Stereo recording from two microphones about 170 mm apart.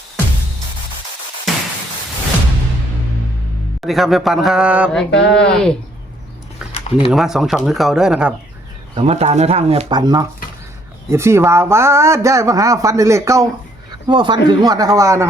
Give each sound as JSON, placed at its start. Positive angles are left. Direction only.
{"t": 3.8, "sound": "speech", "side_deg": 0}
{"t": 4.9, "sound": "speech", "side_deg": 5}
{"t": 7.1, "sound": "speech", "side_deg": 0}
{"t": 9.0, "sound": "speech", "side_deg": -40}
{"t": 9.9, "sound": "speech", "side_deg": -25}